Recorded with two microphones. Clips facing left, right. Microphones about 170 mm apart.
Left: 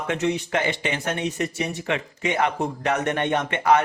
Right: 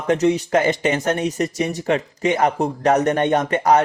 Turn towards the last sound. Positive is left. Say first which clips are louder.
# right 4 dB
turn(degrees=-40)  # may be behind; listen again after turning